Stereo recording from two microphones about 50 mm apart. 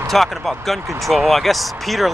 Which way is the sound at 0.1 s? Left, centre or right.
Centre.